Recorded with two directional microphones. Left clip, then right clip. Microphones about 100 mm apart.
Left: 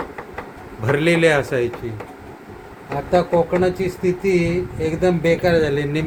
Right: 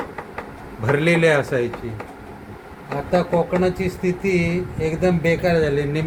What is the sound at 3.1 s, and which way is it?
Speech, 45° left (ahead or behind).